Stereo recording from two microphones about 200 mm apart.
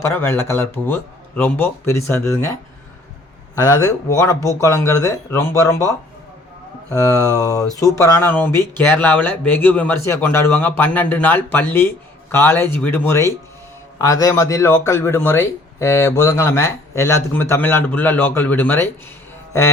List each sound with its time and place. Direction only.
0.0 s a man's voice: 10° left (ahead or behind)
3.7 s a man's voice: 15° left (ahead or behind)
6.9 s a man's voice: 15° left (ahead or behind)